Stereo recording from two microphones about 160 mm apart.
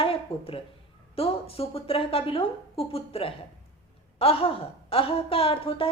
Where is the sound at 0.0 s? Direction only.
35° left (ahead or behind).